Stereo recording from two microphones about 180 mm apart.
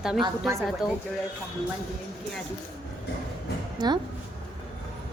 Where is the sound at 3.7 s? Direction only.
25° right (ahead or behind).